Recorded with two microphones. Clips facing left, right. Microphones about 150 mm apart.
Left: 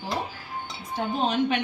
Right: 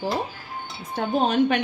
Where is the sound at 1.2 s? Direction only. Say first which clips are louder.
Right 4 dB; 45° right (ahead or behind).